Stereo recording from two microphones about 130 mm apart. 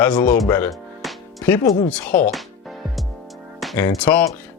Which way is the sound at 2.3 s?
Centre (ahead or behind).